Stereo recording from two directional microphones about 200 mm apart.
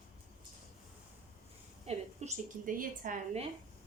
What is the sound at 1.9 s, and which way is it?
A woman's voice, 40° right (ahead or behind).